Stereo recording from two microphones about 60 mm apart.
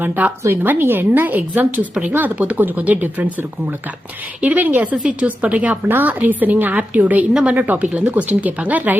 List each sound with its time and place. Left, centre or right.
0.0 s speech: right